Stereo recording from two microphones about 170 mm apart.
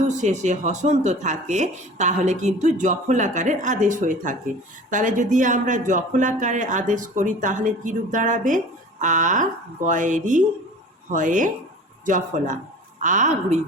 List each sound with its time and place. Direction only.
0.0 s speech: 45° right (ahead or behind)